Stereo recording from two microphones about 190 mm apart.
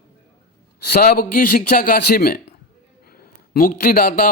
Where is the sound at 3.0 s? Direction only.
50° left (ahead or behind).